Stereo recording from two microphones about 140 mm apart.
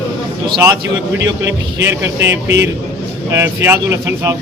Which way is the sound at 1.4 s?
20° right (ahead or behind).